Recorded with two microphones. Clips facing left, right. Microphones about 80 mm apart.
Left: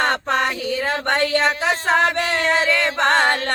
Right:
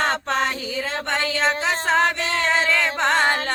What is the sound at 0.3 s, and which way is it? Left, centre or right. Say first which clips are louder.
Music: left 3 dB; left.